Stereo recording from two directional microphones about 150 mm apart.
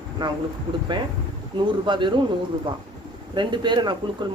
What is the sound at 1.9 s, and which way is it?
Speech, 30° right (ahead or behind).